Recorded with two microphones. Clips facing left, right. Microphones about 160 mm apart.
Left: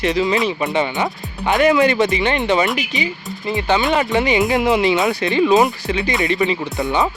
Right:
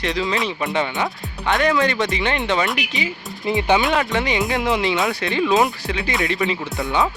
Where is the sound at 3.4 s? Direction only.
20° right (ahead or behind).